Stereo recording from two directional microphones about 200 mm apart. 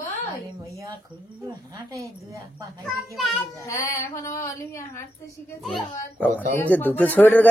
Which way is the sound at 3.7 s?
15° left (ahead or behind).